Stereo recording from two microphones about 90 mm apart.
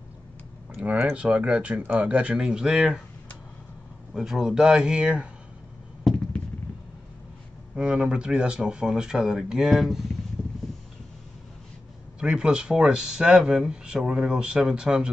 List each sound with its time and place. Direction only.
0.7 s speech: 10° right (ahead or behind)
4.1 s speech: 5° right (ahead or behind)
7.7 s speech: 10° right (ahead or behind)
12.2 s speech: 10° right (ahead or behind)